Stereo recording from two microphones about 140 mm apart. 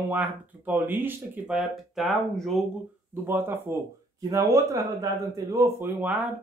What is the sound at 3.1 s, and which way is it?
Speech, 15° right (ahead or behind).